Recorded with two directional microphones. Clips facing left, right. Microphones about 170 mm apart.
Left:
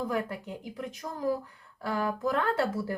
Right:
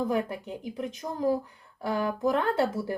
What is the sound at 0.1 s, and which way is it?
A woman's voice, 25° right (ahead or behind).